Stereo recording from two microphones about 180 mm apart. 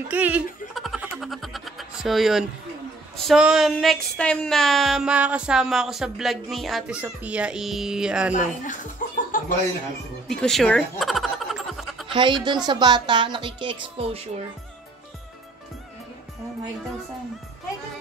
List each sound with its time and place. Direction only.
0.1 s snicker: 10° right (ahead or behind)
3.2 s speech: centre (ahead or behind)
8.3 s speech: 45° left (ahead or behind)
10.2 s a sound: centre (ahead or behind)
12.1 s speech: 25° right (ahead or behind)